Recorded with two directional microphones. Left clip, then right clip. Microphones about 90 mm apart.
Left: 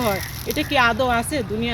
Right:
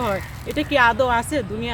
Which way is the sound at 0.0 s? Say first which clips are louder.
Left 1 dB; 30° right (ahead or behind).